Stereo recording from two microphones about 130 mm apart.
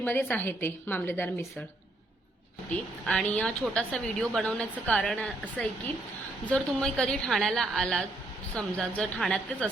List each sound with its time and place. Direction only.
0.0 s speech: 15° left (ahead or behind)
2.6 s a woman's voice: 5° left (ahead or behind)